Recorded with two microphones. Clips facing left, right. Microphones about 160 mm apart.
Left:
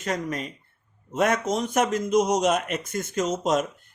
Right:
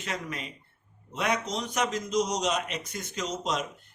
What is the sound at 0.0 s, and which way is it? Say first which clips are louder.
Speech: left 7 dB; 40° left (ahead or behind).